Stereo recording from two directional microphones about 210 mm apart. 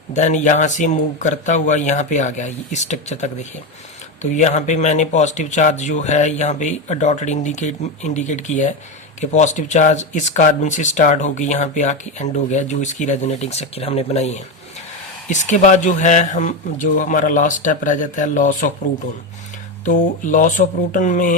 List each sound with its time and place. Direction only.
0.1 s speech: 35° left (ahead or behind)
19.8 s speech: 40° left (ahead or behind)